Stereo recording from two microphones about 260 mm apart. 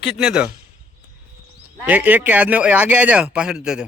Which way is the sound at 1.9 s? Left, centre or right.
Centre.